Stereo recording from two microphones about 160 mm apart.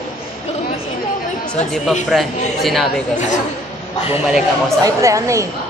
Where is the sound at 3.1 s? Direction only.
50° left (ahead or behind).